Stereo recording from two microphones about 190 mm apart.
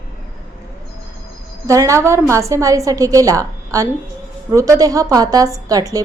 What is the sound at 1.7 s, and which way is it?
A woman's voice, 15° right (ahead or behind).